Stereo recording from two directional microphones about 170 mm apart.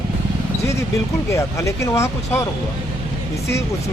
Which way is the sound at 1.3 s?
15° left (ahead or behind).